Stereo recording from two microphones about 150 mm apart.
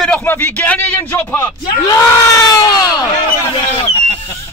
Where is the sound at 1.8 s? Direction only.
20° left (ahead or behind).